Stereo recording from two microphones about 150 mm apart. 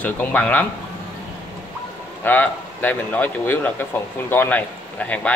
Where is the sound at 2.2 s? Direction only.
10° left (ahead or behind).